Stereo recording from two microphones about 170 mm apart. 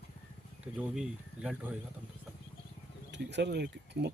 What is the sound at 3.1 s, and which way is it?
Speech, 85° right.